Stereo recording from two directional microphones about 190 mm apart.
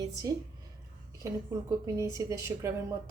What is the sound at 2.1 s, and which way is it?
Speech, 15° right (ahead or behind).